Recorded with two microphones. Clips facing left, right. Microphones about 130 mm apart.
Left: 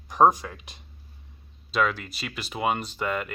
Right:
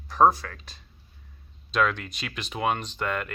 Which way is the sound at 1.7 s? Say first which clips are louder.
Even; 5° left (ahead or behind).